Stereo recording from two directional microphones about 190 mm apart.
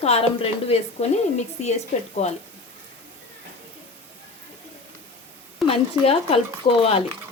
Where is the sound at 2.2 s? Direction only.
35° left (ahead or behind).